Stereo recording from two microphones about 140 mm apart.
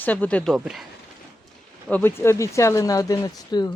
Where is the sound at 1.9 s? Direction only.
15° left (ahead or behind).